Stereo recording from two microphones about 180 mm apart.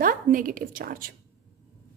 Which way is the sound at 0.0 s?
50° right (ahead or behind).